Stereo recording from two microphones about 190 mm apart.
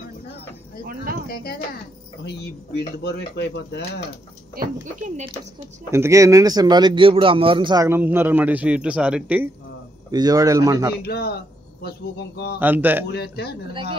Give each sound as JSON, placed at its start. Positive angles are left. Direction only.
{"t": 1.3, "sound": "speech", "side_deg": 50}
{"t": 2.2, "sound": "speech", "side_deg": 60}
{"t": 4.6, "sound": "speech", "side_deg": -40}
{"t": 5.9, "sound": "speech", "side_deg": -15}
{"t": 10.1, "sound": "speech", "side_deg": -20}
{"t": 11.0, "sound": "speech", "side_deg": 55}
{"t": 12.5, "sound": "speech", "side_deg": -10}
{"t": 13.1, "sound": "speech", "side_deg": 60}